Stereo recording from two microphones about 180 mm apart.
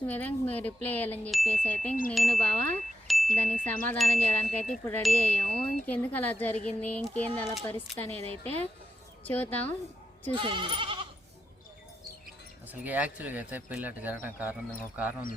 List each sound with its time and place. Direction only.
0.0 s speech: 10° left (ahead or behind)
8.1 s a woman's voice: 35° right (ahead or behind)
9.2 s speech: 10° left (ahead or behind)
10.3 s speech: 25° right (ahead or behind)
12.8 s speech: 10° right (ahead or behind)